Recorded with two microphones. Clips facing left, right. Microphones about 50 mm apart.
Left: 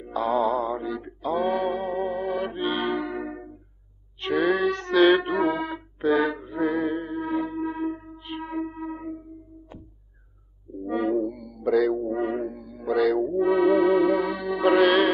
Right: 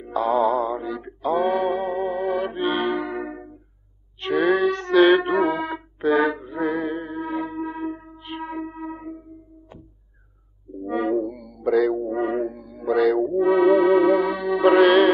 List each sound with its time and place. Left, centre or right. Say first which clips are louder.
0.0 s male singing: right 3 dB; centre
4.2 s music: right 3 dB; centre
10.9 s music: right 2 dB; centre
12.2 s music: right 3 dB; centre